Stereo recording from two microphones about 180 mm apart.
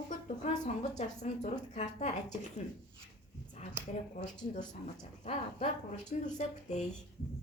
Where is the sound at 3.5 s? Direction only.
40° left (ahead or behind).